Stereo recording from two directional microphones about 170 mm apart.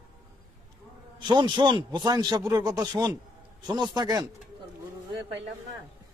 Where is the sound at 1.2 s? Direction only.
25° right (ahead or behind).